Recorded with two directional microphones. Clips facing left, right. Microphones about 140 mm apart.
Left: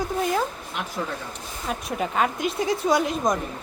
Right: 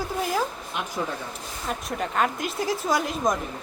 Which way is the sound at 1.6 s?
Centre (ahead or behind).